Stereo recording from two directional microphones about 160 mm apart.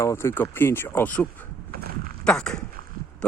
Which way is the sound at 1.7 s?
70° right (ahead or behind).